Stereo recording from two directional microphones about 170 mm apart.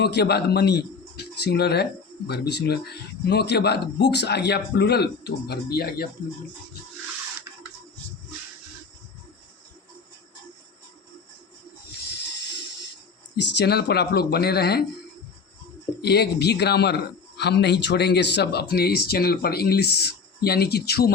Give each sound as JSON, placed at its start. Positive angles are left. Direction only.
{"t": 0.0, "sound": "speech", "side_deg": 70}
{"t": 13.3, "sound": "speech", "side_deg": 85}
{"t": 16.0, "sound": "a man's voice", "side_deg": 75}
{"t": 18.7, "sound": "speech", "side_deg": 70}